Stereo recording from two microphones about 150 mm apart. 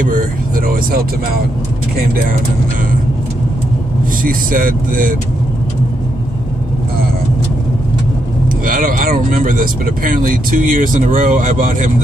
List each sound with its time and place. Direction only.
0.0 s vehicle: 70° right (ahead or behind)
4.2 s speech: 70° right (ahead or behind)
8.6 s speech: 65° right (ahead or behind)